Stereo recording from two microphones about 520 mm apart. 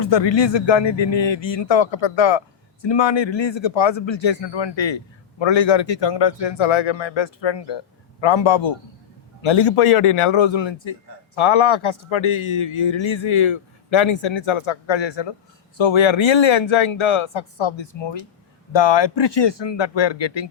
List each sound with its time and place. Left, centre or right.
0.0 s a man's voice: left